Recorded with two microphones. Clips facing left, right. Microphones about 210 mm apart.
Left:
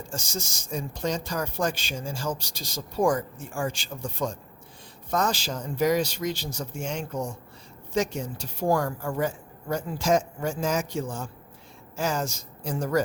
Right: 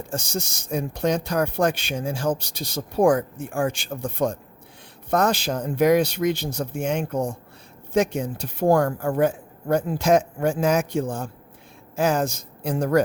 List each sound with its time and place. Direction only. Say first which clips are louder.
0.1 s speech: right 7 dB; 60° right (ahead or behind)